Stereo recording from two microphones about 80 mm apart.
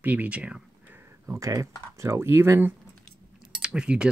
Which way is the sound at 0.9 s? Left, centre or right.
Right.